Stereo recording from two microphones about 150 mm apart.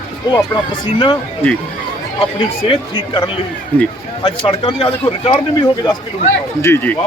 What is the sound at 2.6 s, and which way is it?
Speech, 35° left (ahead or behind).